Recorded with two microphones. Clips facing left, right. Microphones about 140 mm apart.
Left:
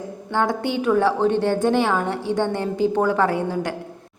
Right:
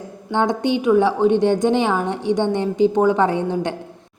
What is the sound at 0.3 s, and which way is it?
A woman's voice, 20° right (ahead or behind).